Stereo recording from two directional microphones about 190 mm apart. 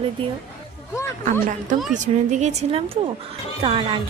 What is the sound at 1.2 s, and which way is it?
Speech, 40° right (ahead or behind).